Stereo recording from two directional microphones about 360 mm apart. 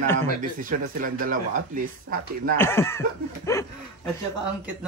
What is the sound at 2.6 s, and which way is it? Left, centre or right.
Speech, centre.